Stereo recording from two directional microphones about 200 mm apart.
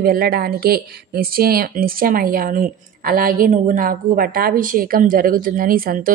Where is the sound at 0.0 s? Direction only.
50° right (ahead or behind).